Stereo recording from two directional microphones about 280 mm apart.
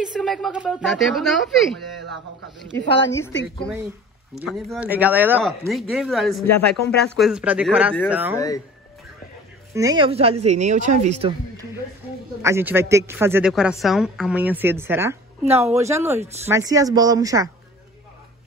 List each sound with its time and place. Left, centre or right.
0.0 s speech: centre
3.1 s a woman's voice: centre
4.4 s speech: centre
9.8 s a woman's voice: centre